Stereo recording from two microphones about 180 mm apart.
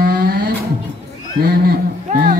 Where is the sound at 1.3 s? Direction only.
60° right (ahead or behind).